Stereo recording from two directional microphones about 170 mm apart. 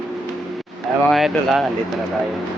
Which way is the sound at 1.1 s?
Centre (ahead or behind).